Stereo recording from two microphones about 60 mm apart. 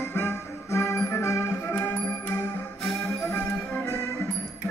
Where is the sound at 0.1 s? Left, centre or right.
Left.